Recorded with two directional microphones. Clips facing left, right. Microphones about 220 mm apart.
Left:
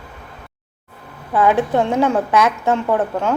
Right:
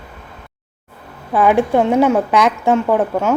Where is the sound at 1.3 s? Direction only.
15° right (ahead or behind).